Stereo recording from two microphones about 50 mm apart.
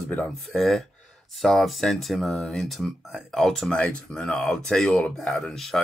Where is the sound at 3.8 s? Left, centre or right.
Left.